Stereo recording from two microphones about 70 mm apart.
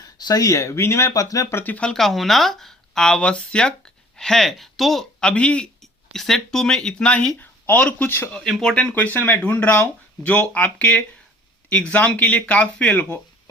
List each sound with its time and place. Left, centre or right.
0.0 s speech: left
1.5 s speech: left
1.7 s speech: centre
2.0 s speech: centre
5.2 s speech: centre
5.8 s speech: centre; by 8.1 s left
8.4 s speech: centre
8.7 s speech: left